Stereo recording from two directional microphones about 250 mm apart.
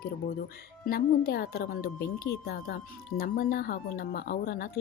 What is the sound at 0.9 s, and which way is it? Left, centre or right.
Speech, left.